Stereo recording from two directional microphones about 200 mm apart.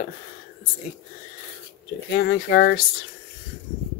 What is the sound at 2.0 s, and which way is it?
Speech, 55° left (ahead or behind).